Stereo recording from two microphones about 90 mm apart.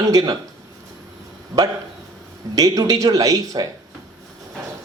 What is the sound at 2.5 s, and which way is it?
Speech, 40° right (ahead or behind).